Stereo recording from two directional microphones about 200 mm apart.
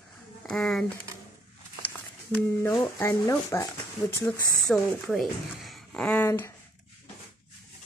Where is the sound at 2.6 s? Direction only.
15° left (ahead or behind).